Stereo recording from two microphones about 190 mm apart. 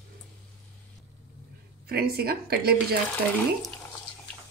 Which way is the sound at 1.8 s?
55° right (ahead or behind).